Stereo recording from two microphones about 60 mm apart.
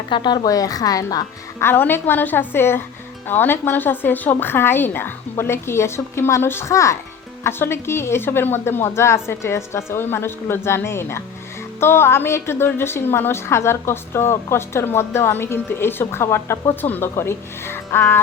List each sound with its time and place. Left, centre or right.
0.4 s a woman's voice: left
1.5 s a woman's voice: left
6.7 s speech: left
7.4 s a woman's voice: left
16.8 s a woman's voice: left
17.2 s a woman's voice: left